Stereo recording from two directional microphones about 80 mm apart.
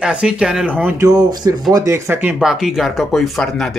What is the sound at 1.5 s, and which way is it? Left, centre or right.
Speech, right.